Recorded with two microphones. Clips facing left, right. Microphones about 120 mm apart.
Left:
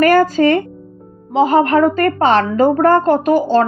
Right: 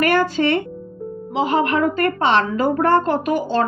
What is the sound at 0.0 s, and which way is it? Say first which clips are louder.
A woman's voice: left 6 dB; 40° left (ahead or behind).